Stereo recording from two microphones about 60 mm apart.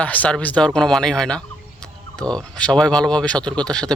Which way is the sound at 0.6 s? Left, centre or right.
Centre.